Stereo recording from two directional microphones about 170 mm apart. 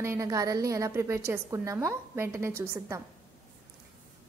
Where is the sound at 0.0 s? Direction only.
15° right (ahead or behind).